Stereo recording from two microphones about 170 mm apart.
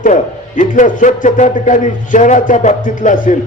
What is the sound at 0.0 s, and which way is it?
A man's voice, 50° left (ahead or behind).